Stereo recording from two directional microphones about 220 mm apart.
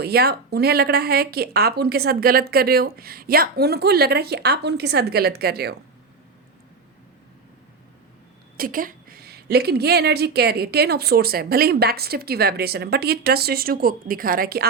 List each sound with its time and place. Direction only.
0.0 s a woman's voice: 45° right (ahead or behind)
8.5 s a woman's voice: 40° right (ahead or behind)